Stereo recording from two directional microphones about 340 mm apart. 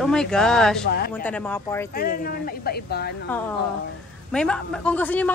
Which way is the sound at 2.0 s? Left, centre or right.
Left.